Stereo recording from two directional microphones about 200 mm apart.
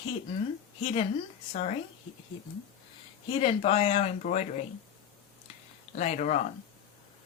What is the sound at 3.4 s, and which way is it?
Speech, 30° left (ahead or behind).